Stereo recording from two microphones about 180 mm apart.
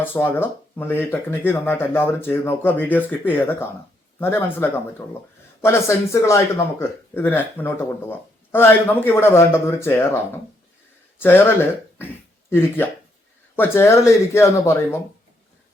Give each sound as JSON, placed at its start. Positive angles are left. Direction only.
{"t": 0.0, "sound": "speech", "side_deg": 10}